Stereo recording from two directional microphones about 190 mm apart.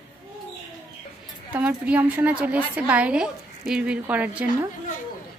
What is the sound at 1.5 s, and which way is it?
A woman's voice, 5° right (ahead or behind).